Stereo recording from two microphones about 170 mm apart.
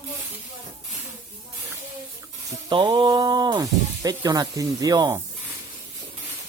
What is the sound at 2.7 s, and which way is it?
Speech, 25° right (ahead or behind).